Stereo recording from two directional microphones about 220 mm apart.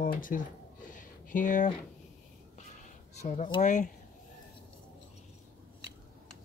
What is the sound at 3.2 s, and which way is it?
Speech, 30° left (ahead or behind).